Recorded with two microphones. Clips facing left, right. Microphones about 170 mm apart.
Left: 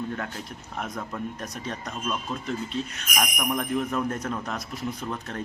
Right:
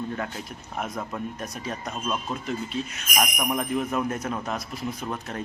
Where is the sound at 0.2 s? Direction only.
5° right (ahead or behind).